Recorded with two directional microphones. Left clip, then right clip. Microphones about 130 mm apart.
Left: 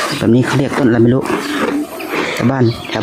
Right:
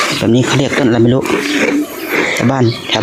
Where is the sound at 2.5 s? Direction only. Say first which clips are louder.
Right 2 dB; 20° left (ahead or behind).